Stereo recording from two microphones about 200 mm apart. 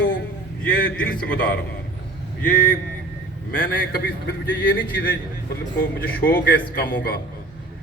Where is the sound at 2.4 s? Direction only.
45° left (ahead or behind).